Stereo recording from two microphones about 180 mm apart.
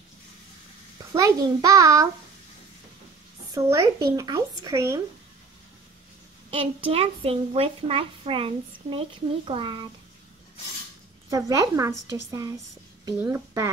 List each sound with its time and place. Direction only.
1.1 s speech: 20° right (ahead or behind)
3.5 s speech: 20° right (ahead or behind)
6.5 s a woman's voice: 30° right (ahead or behind)
11.2 s a woman's voice: 20° right (ahead or behind)